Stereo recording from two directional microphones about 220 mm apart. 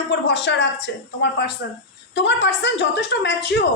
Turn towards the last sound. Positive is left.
turn(degrees=50)  # may be behind; listen again after turning